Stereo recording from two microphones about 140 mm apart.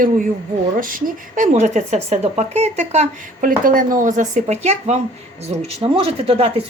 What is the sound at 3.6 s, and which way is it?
Speech, 80° right.